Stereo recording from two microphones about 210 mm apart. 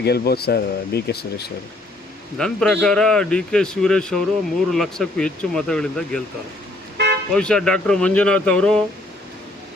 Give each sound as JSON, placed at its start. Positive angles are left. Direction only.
{"t": 0.0, "sound": "speech", "side_deg": 50}
{"t": 2.4, "sound": "a man's voice", "side_deg": 5}
{"t": 6.9, "sound": "toot", "side_deg": -50}
{"t": 7.3, "sound": "a man's voice", "side_deg": 5}